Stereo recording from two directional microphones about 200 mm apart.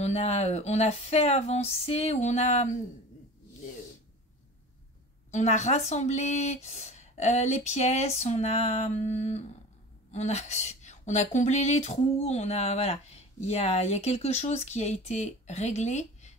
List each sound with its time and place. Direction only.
0.0 s a woman's voice: 35° left (ahead or behind)
5.3 s a woman's voice: 35° left (ahead or behind)